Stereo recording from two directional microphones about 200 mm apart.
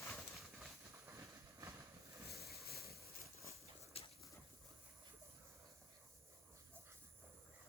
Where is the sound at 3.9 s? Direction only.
30° left (ahead or behind).